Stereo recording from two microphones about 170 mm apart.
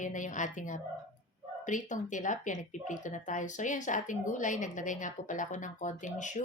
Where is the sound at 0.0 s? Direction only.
50° left (ahead or behind).